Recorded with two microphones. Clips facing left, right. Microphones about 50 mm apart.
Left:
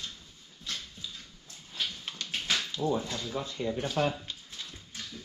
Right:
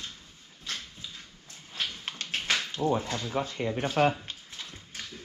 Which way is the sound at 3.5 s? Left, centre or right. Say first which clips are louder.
Right 1 dB; right.